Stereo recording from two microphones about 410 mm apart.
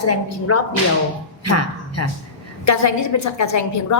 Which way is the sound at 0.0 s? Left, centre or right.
Left.